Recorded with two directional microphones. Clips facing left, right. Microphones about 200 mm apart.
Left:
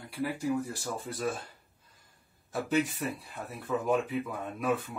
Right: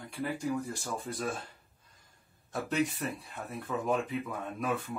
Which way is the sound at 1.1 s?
5° left (ahead or behind).